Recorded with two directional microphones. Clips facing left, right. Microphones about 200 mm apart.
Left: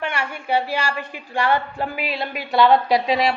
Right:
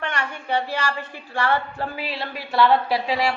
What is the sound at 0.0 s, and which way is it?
A woman's voice, 10° left (ahead or behind).